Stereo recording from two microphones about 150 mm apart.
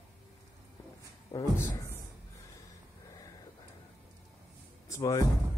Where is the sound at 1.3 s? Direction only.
25° left (ahead or behind).